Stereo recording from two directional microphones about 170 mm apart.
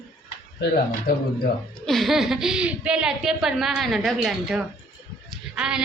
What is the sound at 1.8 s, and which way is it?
A woman's voice, centre (ahead or behind).